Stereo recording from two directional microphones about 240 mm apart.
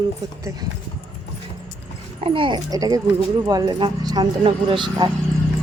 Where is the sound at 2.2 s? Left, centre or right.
Right.